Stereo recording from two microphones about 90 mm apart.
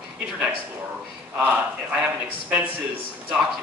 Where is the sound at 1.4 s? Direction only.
15° right (ahead or behind).